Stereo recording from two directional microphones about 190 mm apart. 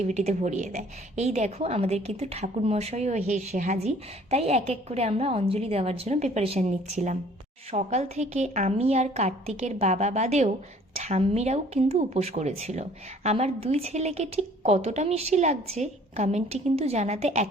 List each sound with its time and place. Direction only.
0.0 s a woman's voice: 35° right (ahead or behind)